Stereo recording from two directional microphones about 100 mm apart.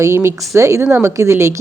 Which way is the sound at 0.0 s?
25° right (ahead or behind).